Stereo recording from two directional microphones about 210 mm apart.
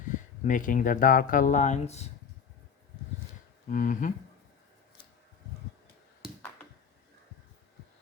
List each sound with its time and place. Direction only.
0.1 s speech: 40° left (ahead or behind)
3.7 s speech: 40° left (ahead or behind)